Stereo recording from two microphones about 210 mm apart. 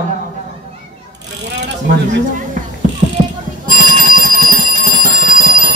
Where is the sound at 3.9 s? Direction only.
40° right (ahead or behind).